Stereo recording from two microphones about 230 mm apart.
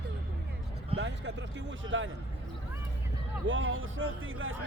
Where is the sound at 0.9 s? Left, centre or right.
Right.